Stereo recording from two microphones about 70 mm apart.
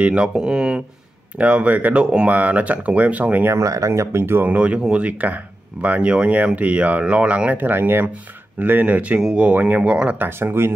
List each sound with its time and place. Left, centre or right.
0.0 s speech: centre
3.4 s speech: right
4.5 s speech: centre
10.1 s speech: right